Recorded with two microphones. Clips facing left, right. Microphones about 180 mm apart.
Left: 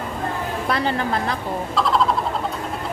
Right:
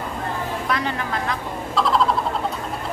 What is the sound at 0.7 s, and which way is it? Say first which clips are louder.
Speech: left 5 dB; 35° left (ahead or behind).